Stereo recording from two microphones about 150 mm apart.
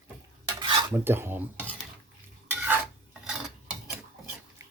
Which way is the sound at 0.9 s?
15° right (ahead or behind).